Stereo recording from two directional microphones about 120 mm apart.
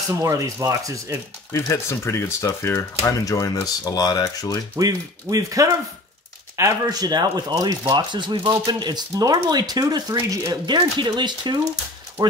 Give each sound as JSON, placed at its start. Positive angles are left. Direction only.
{"t": 0.2, "sound": "speech", "side_deg": -25}
{"t": 1.5, "sound": "speech", "side_deg": 25}
{"t": 4.7, "sound": "speech", "side_deg": -30}